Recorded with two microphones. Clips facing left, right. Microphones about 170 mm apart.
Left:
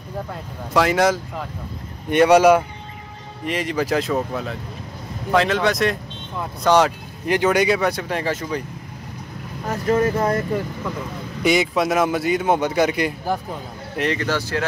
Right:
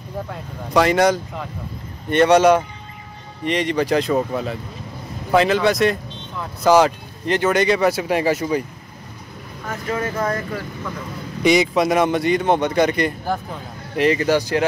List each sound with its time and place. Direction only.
0.3 s a man's voice: centre (ahead or behind)
7.2 s a man's voice: 10° left (ahead or behind); by 8.6 s 10° right (ahead or behind)
9.7 s speech: 35° left (ahead or behind)
11.4 s a man's voice: centre (ahead or behind)
14.2 s speech: 15° right (ahead or behind)